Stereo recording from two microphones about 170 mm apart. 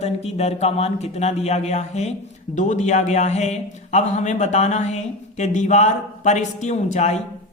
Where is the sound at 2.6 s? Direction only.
45° left (ahead or behind).